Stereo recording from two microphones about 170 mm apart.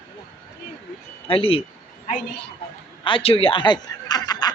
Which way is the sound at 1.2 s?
35° left (ahead or behind).